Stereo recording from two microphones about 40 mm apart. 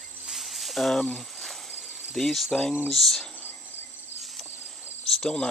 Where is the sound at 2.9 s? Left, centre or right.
Centre.